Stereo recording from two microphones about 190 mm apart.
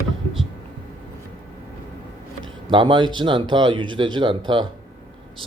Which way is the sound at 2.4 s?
25° right (ahead or behind).